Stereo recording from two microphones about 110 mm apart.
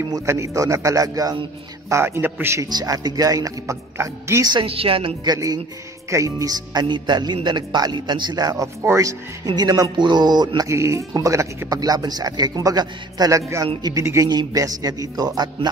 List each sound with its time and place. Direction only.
0.1 s a man's voice: 30° right (ahead or behind)
2.7 s speech: 35° right (ahead or behind)
4.6 s a woman's voice: 60° right (ahead or behind)
5.2 s a man's voice: 35° right (ahead or behind)
9.5 s speech: 35° right (ahead or behind)
10.7 s a man's voice: 25° right (ahead or behind)